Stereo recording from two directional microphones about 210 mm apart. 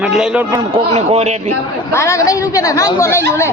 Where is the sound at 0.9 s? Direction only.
30° right (ahead or behind).